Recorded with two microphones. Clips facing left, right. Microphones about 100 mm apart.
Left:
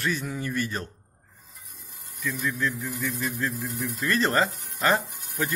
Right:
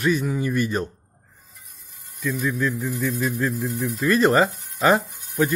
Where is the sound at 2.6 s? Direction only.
20° right (ahead or behind).